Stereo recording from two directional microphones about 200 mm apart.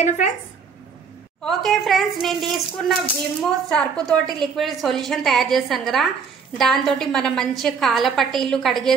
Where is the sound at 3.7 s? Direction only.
5° left (ahead or behind).